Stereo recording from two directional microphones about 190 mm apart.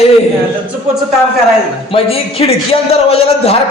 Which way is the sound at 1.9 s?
30° left (ahead or behind).